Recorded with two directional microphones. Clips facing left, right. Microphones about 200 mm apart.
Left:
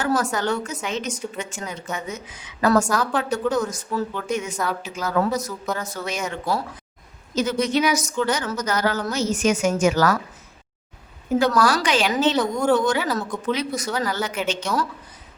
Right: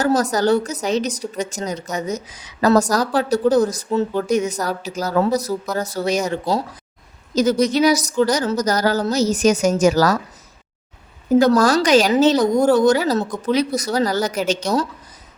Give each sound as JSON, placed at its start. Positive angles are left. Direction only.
{"t": 0.2, "sound": "a woman's voice", "side_deg": -40}
{"t": 11.3, "sound": "a woman's voice", "side_deg": -40}